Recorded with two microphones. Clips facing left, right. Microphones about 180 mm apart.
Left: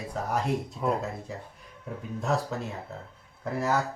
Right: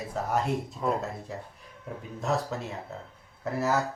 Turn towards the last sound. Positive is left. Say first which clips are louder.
# even
turn(degrees=0)  # may be behind; listen again after turning